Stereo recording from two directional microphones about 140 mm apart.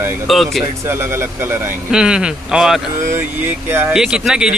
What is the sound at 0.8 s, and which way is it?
Speech, 20° right (ahead or behind).